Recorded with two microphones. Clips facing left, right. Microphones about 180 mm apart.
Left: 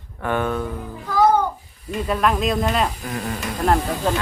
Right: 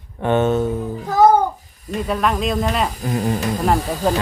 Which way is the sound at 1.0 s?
45° right (ahead or behind).